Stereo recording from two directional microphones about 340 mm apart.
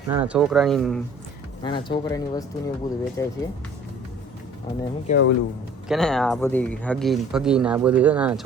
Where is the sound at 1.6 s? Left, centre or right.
Centre.